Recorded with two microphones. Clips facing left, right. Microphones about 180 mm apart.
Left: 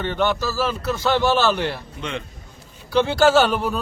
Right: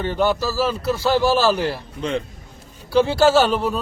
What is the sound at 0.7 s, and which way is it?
Speech, 30° right (ahead or behind).